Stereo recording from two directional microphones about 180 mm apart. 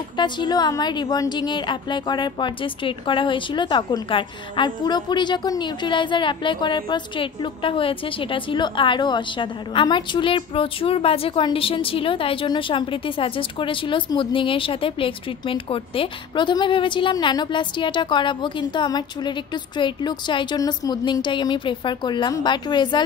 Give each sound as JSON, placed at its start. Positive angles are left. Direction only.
{"t": 0.2, "sound": "a woman's voice", "side_deg": 25}